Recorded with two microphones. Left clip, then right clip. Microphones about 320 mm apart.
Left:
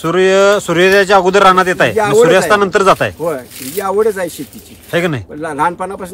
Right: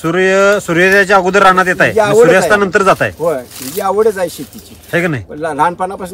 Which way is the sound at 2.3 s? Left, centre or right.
Centre.